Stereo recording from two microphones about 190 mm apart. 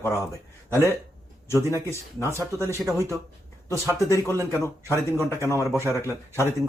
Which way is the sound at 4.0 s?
15° left (ahead or behind).